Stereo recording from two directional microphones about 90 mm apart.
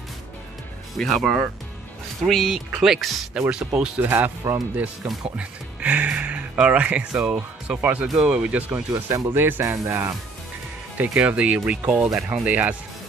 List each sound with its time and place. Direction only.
0.9 s speech: 5° left (ahead or behind)
3.3 s speech: 10° right (ahead or behind)
4.0 s speech: 25° right (ahead or behind)
5.0 s speech: 15° right (ahead or behind)
8.9 s speech: 30° right (ahead or behind)
11.0 s speech: 15° right (ahead or behind)